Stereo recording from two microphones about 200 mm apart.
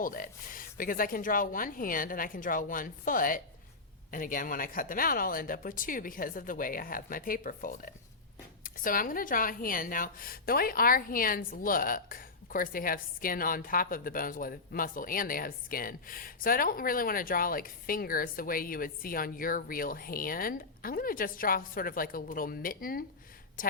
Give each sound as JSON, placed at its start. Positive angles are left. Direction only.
{"t": 0.0, "sound": "a woman's voice", "side_deg": 45}